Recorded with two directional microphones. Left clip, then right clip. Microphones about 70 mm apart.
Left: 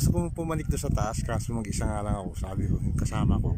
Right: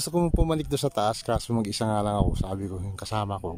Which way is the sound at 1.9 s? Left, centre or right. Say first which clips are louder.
Right 8 dB; right.